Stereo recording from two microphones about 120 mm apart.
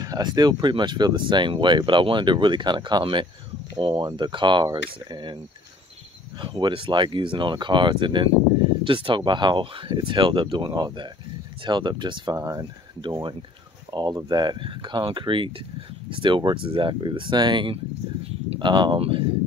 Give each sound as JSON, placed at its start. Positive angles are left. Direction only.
{"t": 0.0, "sound": "speech", "side_deg": -35}
{"t": 6.4, "sound": "speech", "side_deg": -45}